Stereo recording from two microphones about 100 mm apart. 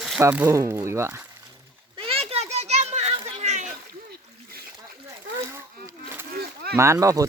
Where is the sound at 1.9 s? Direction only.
70° right (ahead or behind).